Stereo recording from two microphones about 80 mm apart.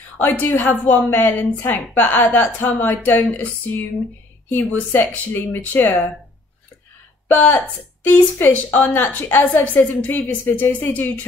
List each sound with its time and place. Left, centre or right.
0.2 s a woman's voice: left
7.2 s a woman's voice: left